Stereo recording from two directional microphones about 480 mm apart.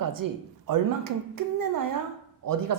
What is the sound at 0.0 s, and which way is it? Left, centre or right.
Speech, right.